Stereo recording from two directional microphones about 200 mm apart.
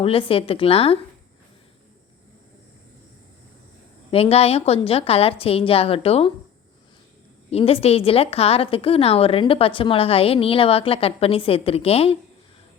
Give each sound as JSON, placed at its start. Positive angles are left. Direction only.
{"t": 0.0, "sound": "a woman's voice", "side_deg": 25}
{"t": 4.1, "sound": "a woman's voice", "side_deg": 30}
{"t": 7.5, "sound": "a woman's voice", "side_deg": 30}